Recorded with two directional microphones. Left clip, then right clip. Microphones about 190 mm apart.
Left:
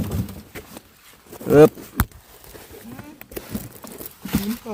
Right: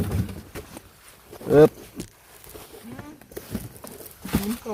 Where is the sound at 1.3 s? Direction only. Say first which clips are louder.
Left 3 dB; 60° left (ahead or behind).